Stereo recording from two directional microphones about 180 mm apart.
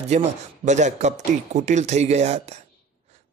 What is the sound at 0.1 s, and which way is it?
A man's voice, 40° right (ahead or behind).